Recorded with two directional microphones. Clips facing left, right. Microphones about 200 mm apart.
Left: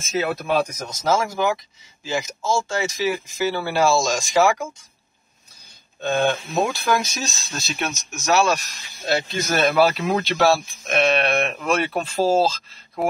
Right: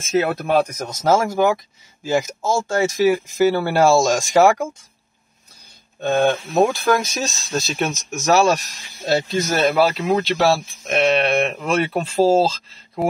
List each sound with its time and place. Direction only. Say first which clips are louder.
0.2 s speech: right 1 dB; 55° right (ahead or behind)
5.9 s speech: right 3 dB; 50° right (ahead or behind); by 12.5 s 30° right (ahead or behind)